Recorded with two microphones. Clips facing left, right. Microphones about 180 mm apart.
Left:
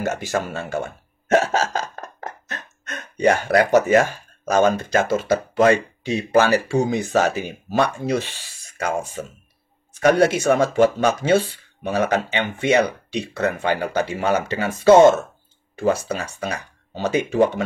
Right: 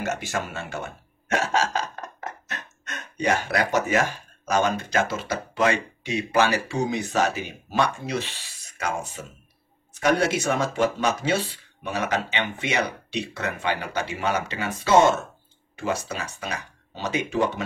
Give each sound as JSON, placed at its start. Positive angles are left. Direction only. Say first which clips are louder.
{"t": 0.1, "sound": "speech", "louder": "left 5 dB", "side_deg": 40}